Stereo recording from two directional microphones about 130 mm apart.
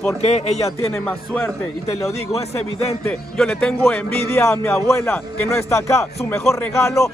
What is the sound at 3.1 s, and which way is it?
Speech, 5° left (ahead or behind).